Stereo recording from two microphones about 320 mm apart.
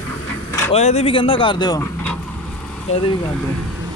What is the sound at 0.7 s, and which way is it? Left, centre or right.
Speech, centre.